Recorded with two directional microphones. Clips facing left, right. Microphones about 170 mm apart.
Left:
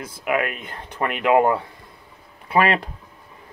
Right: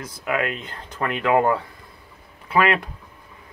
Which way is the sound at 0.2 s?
15° left (ahead or behind).